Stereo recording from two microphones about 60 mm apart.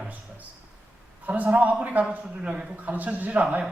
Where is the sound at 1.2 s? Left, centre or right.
Right.